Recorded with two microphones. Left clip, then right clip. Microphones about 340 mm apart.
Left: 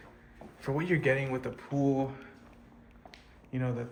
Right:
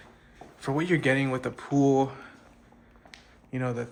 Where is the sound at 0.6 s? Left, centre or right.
Centre.